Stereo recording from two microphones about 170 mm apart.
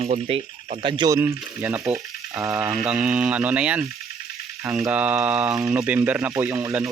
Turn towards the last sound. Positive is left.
turn(degrees=-10)  # may be behind; listen again after turning